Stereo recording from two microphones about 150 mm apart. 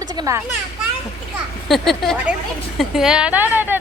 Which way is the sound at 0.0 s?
25° right (ahead or behind).